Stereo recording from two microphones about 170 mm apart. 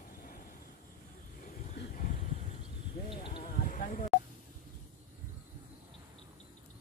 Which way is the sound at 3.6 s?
50° left (ahead or behind).